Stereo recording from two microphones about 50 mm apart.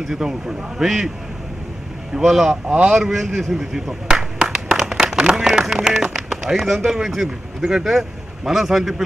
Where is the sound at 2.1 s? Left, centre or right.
Centre.